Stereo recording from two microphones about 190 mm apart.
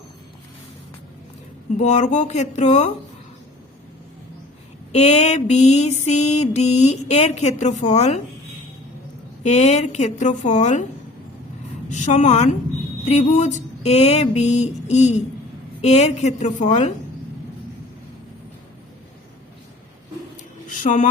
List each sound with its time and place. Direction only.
1.7 s mantra: 35° left (ahead or behind)
4.9 s mantra: 35° left (ahead or behind)
9.4 s mantra: 35° left (ahead or behind)
11.9 s mantra: 40° left (ahead or behind)
20.9 s mantra: 35° left (ahead or behind)